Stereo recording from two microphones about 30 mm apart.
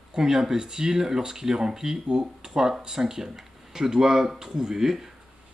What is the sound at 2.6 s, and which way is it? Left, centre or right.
Speech, centre.